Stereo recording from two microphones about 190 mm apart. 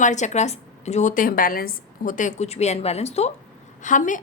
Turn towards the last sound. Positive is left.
turn(degrees=40)  # may be behind; listen again after turning